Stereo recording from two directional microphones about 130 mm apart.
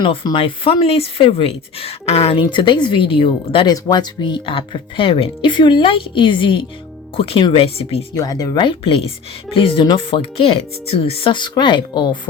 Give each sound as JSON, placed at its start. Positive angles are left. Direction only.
{"t": 0.0, "sound": "speech", "side_deg": 40}
{"t": 8.1, "sound": "speech", "side_deg": 30}
{"t": 8.5, "sound": "speech", "side_deg": 45}